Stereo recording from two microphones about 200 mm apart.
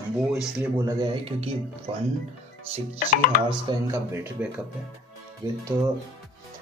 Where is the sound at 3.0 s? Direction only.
45° left (ahead or behind).